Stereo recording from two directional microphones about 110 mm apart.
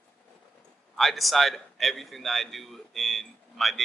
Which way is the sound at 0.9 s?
Centre (ahead or behind).